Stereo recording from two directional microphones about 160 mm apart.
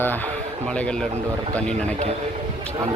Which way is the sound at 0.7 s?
5° left (ahead or behind).